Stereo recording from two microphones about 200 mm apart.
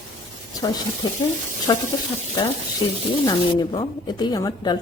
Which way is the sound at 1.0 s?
20° left (ahead or behind).